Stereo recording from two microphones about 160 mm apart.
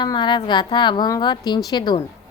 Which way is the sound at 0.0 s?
30° left (ahead or behind).